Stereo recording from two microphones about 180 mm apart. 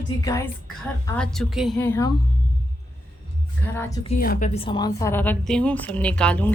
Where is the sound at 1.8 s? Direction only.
15° left (ahead or behind).